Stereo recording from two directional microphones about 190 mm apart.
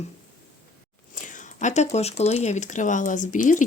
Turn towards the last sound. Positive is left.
turn(degrees=40)  # may be behind; listen again after turning